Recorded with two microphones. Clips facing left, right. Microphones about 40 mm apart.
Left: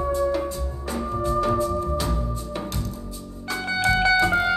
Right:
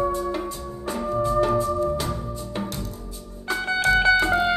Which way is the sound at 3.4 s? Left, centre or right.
Right.